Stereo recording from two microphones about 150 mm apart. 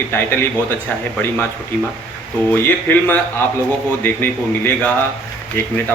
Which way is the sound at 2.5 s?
15° left (ahead or behind).